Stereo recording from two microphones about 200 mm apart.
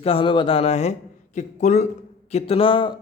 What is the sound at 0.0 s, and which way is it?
A man's voice, 25° left (ahead or behind).